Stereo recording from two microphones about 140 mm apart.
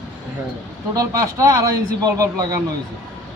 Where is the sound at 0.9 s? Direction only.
25° right (ahead or behind).